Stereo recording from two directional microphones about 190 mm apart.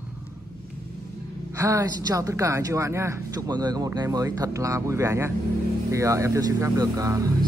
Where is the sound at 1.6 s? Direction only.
15° right (ahead or behind).